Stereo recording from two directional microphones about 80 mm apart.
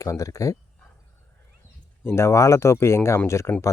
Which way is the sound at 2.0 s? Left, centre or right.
Left.